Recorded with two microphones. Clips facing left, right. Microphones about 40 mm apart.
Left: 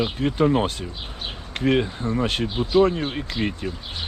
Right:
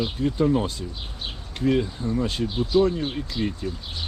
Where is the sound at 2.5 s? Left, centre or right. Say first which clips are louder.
Left 2 dB; left.